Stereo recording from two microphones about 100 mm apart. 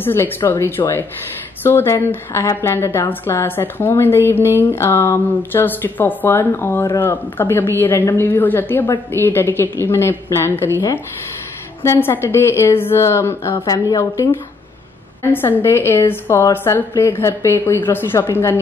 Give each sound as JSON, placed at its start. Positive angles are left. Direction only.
{"t": 0.0, "sound": "a woman's voice", "side_deg": 20}
{"t": 13.7, "sound": "a woman's voice", "side_deg": 35}
{"t": 15.6, "sound": "a woman's voice", "side_deg": 25}